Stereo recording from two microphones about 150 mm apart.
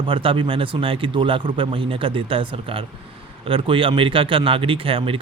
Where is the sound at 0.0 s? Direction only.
35° right (ahead or behind).